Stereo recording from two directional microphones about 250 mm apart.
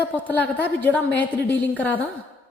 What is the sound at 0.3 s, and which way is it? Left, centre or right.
A woman's voice, centre.